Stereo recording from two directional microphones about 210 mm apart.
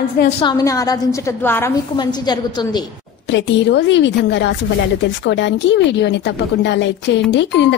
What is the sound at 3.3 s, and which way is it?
A woman's voice, 55° left (ahead or behind).